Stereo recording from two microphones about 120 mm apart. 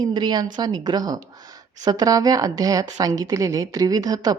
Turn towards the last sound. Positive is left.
turn(degrees=-30)  # may be behind; listen again after turning